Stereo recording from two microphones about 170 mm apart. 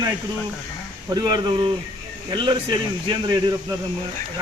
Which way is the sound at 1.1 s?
25° right (ahead or behind).